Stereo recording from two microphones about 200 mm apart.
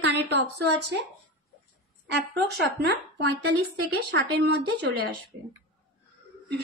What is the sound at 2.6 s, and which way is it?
A woman's voice, 55° right (ahead or behind).